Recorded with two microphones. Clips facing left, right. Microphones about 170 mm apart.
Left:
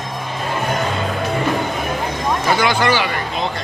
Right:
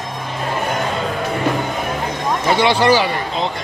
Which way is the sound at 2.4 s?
30° right (ahead or behind).